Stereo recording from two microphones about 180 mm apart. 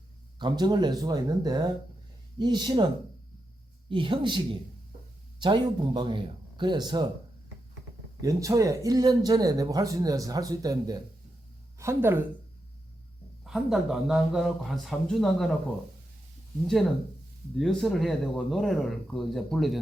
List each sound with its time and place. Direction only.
0.3 s speech: 25° right (ahead or behind)
5.4 s speech: 25° right (ahead or behind)
8.2 s speech: 20° right (ahead or behind)
13.4 s speech: centre (ahead or behind)
17.6 s speech: centre (ahead or behind)